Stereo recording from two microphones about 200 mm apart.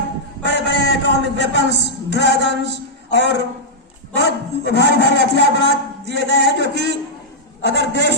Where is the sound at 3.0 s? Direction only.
60° left (ahead or behind).